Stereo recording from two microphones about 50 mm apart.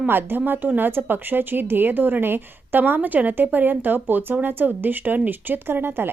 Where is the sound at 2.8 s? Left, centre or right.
Right.